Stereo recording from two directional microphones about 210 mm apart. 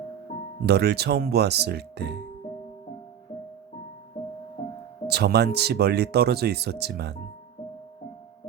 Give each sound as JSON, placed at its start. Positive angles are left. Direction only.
{"t": 0.6, "sound": "speech", "side_deg": -50}
{"t": 5.0, "sound": "speech", "side_deg": -50}